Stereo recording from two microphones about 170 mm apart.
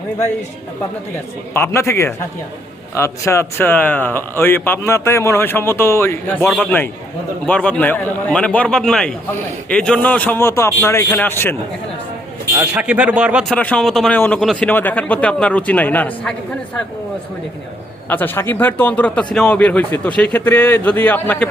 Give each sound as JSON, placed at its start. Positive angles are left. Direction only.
{"t": 1.5, "sound": "a man's voice", "side_deg": 15}
{"t": 12.5, "sound": "speech", "side_deg": -5}
{"t": 13.5, "sound": "a man's voice", "side_deg": 5}
{"t": 18.1, "sound": "a man's voice", "side_deg": 10}